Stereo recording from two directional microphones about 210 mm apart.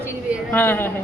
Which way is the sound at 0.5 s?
10° left (ahead or behind).